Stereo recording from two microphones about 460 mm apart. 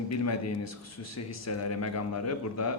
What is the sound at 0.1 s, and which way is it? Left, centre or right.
A man's voice, left.